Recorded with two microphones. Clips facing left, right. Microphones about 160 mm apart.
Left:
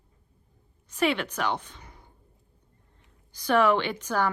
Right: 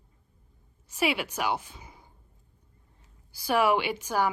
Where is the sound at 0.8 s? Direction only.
10° right (ahead or behind).